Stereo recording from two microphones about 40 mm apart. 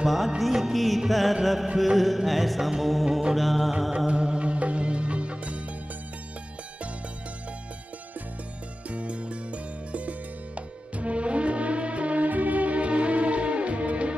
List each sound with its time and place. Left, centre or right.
0.0 s music: centre
4.1 s music: right
8.9 s music: right